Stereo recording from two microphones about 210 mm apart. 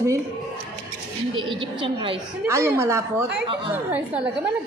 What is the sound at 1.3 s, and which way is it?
Speech, 25° right (ahead or behind).